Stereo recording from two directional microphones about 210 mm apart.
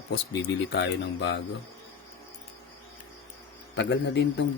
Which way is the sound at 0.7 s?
55° left (ahead or behind).